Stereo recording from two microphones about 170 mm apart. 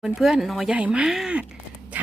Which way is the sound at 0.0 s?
Centre (ahead or behind).